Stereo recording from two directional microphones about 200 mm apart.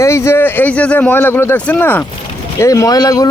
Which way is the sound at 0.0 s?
15° left (ahead or behind).